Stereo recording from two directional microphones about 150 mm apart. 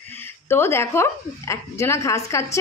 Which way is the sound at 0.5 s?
15° left (ahead or behind).